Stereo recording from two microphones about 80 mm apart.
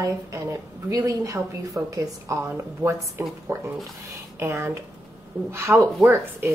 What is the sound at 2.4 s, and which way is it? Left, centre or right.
A woman's voice, right.